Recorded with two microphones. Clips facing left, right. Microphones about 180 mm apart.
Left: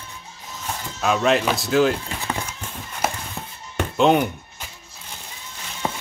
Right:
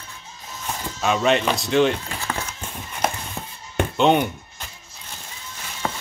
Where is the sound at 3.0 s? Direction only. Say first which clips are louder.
Right 1 dB; 5° left (ahead or behind).